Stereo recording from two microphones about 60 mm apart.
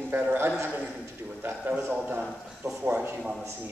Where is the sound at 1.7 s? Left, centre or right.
Right.